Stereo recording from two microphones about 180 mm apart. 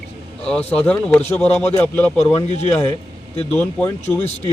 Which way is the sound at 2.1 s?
35° left (ahead or behind).